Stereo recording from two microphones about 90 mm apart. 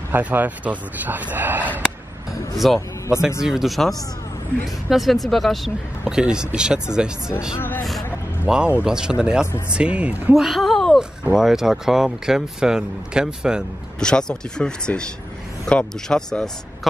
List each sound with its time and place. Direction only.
0.1 s speech: 20° right (ahead or behind)
2.6 s a man's voice: centre (ahead or behind); by 10.3 s 15° right (ahead or behind)
10.3 s a sound: centre (ahead or behind)
11.3 s speech: 5° right (ahead or behind)
13.9 s speech: 10° left (ahead or behind)